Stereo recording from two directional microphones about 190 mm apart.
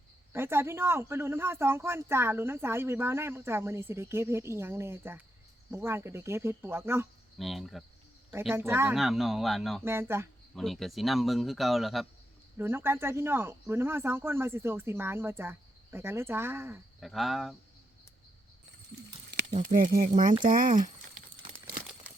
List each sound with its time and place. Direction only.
0.3 s speech: 10° right (ahead or behind)
7.3 s speech: centre (ahead or behind)
8.5 s speech: 15° right (ahead or behind)
9.0 s speech: centre (ahead or behind)
9.8 s speech: 15° right (ahead or behind)
10.5 s speech: centre (ahead or behind)
12.5 s speech: 10° right (ahead or behind)
17.0 s speech: centre (ahead or behind)
19.5 s speech: 45° right (ahead or behind)